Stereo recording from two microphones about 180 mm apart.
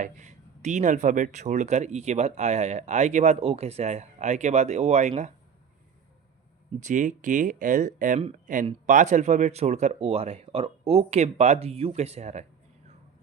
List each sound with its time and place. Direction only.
0.0 s speech: 40° right (ahead or behind)
6.7 s speech: 45° right (ahead or behind)